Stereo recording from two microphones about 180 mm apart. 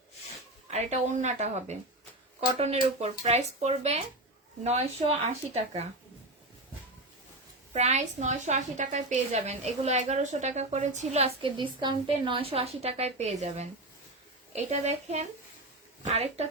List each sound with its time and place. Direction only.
0.7 s a woman's voice: 40° right (ahead or behind)
7.7 s a woman's voice: 40° right (ahead or behind)